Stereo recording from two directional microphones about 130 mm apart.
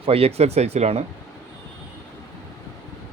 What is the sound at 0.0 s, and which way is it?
Speech, 50° right (ahead or behind).